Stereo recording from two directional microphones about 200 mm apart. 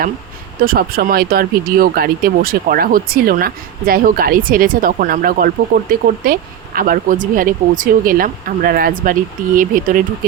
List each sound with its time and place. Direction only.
0.6 s speech: 45° right (ahead or behind)